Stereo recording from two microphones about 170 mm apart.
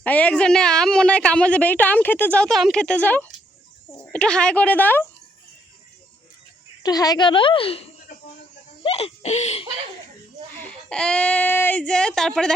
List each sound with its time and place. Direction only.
0.0 s a woman's voice: 10° left (ahead or behind)
6.8 s a woman's voice: 20° left (ahead or behind); by 9.6 s 40° left (ahead or behind)
10.6 s speech: 5° left (ahead or behind)